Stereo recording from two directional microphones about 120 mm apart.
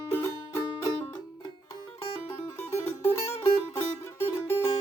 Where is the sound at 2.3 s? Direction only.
20° left (ahead or behind).